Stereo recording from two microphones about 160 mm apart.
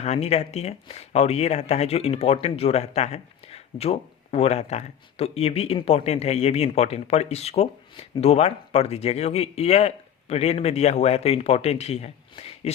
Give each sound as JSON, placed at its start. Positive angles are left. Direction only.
{"t": 0.0, "sound": "speech", "side_deg": 40}